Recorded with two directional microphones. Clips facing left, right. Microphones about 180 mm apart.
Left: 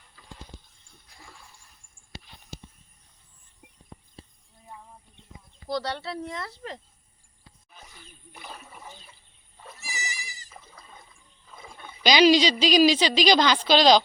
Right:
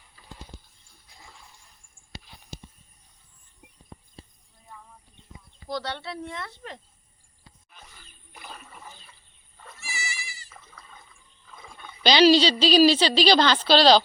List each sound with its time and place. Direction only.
5.6 s speech: centre (ahead or behind)
8.3 s toilet flush: centre (ahead or behind)
9.6 s goat: 10° left (ahead or behind)
9.8 s goat: 40° left (ahead or behind)
10.5 s a sound: 15° left (ahead or behind)
11.6 s speech: 20° left (ahead or behind)